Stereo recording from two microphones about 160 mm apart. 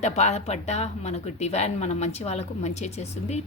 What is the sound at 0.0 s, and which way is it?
A woman's voice, 45° left (ahead or behind).